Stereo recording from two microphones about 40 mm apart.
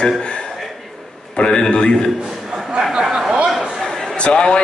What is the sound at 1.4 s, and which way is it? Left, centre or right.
Speech, left.